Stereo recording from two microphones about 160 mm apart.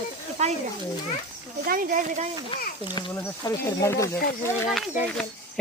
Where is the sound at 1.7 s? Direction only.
60° right (ahead or behind).